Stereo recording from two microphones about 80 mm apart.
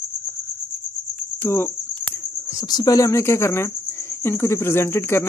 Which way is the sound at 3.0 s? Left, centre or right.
Left.